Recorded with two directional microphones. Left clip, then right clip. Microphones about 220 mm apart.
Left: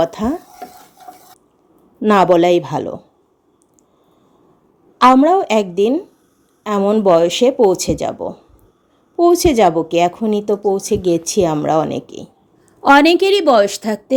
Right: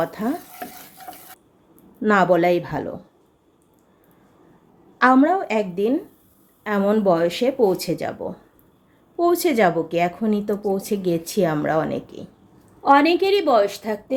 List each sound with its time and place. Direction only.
0.0 s speech: 35° left (ahead or behind)
2.0 s speech: 30° left (ahead or behind)
4.9 s speech: 30° left (ahead or behind)
12.8 s a woman's voice: 50° left (ahead or behind)